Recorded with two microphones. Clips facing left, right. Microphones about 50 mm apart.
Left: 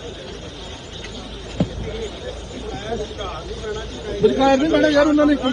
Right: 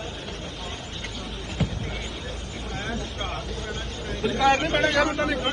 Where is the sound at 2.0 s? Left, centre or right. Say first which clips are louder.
Left 5 dB; right.